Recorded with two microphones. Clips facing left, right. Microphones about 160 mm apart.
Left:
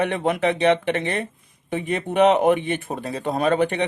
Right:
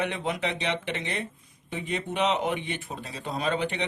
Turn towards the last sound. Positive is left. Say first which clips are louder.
# left 8 dB
turn(degrees=55)  # may be behind; listen again after turning